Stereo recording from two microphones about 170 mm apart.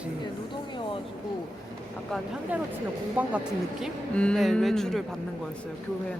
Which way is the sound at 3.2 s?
10° right (ahead or behind).